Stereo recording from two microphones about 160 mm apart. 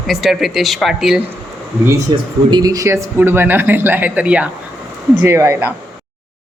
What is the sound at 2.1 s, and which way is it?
Speech, 30° right (ahead or behind).